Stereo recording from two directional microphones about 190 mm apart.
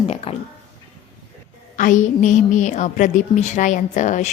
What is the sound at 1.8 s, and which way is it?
A woman's voice, 40° left (ahead or behind).